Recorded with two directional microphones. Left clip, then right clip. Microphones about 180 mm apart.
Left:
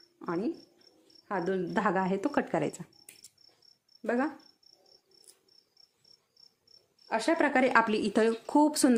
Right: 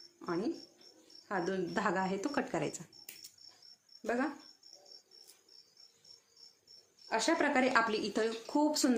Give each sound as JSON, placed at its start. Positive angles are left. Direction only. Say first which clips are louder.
{"t": 0.2, "sound": "a sound", "louder": "left 3 dB", "side_deg": 55}
{"t": 1.3, "sound": "speech", "louder": "left 4 dB", "side_deg": 50}
{"t": 4.0, "sound": "speech", "louder": "left 4 dB", "side_deg": 50}
{"t": 7.1, "sound": "a woman's voice", "louder": "left 4 dB", "side_deg": 50}